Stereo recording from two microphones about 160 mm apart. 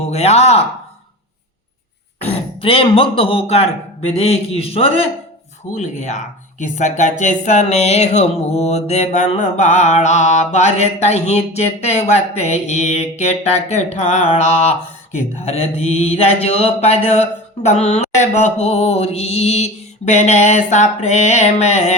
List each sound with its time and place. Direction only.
0.0 s speech: 40° left (ahead or behind)
2.6 s speech: 35° left (ahead or behind)
5.7 s speech: 50° left (ahead or behind)